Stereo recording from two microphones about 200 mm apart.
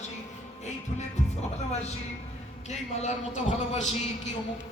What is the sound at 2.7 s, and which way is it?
A man's voice, 35° left (ahead or behind).